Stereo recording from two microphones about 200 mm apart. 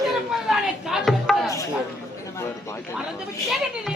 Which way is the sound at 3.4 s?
Centre (ahead or behind).